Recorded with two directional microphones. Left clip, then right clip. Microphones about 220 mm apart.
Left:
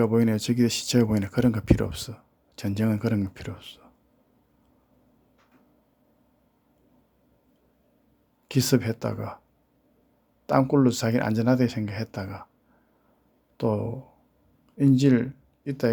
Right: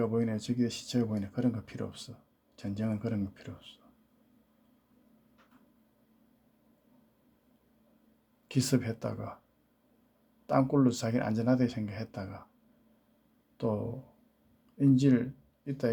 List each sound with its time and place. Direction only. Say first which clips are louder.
0.0 s speech: left 8 dB; 30° left (ahead or behind)
8.4 s speech: left 7 dB; 20° left (ahead or behind)
10.4 s speech: left 6 dB; 20° left (ahead or behind)
13.6 s speech: left 7 dB; 20° left (ahead or behind)